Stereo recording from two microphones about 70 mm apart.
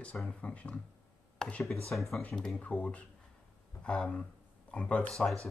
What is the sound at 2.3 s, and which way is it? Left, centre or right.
Speech, centre.